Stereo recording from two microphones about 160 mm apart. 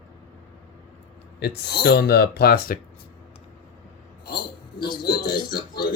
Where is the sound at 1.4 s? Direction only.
85° left; by 2.8 s 70° left (ahead or behind).